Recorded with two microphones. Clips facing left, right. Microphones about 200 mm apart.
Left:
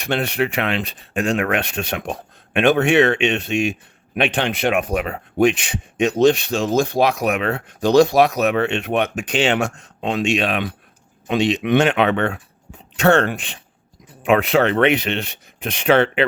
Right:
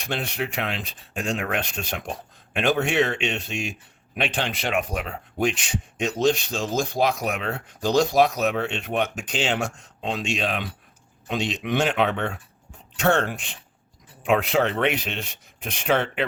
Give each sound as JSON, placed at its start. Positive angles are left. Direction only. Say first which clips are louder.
{"t": 0.0, "sound": "speech", "louder": "left 8 dB", "side_deg": 70}